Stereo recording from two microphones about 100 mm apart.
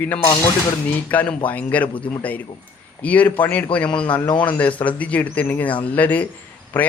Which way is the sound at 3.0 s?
15° left (ahead or behind).